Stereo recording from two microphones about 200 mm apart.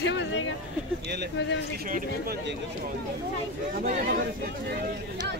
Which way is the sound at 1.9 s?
40° right (ahead or behind).